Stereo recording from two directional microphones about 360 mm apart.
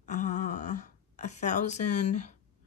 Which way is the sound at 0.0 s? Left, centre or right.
Centre.